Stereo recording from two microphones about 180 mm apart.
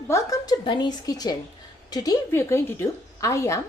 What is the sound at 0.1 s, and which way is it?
A woman's voice, 20° left (ahead or behind).